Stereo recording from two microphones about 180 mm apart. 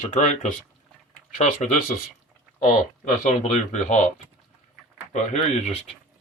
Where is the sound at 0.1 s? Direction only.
40° left (ahead or behind).